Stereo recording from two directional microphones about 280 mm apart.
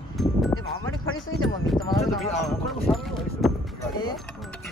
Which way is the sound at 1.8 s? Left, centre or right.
Centre.